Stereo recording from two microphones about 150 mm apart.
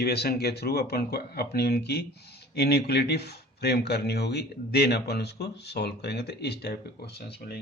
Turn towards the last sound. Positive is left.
turn(degrees=90)